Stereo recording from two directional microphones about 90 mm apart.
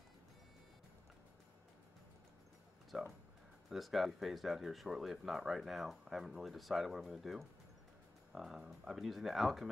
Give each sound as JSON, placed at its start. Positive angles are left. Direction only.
{"t": 2.9, "sound": "speech", "side_deg": 0}